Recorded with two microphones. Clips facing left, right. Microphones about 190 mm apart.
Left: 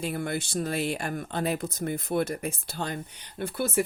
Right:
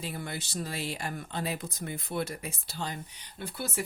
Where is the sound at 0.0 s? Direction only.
55° left (ahead or behind).